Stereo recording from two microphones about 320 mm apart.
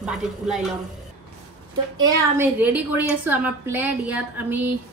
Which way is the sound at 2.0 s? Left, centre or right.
Centre.